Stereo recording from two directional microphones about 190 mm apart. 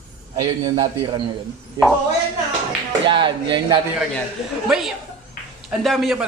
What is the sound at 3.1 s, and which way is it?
Speech, 25° right (ahead or behind).